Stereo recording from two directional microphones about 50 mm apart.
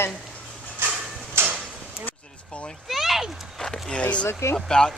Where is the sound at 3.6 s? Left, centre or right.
Centre.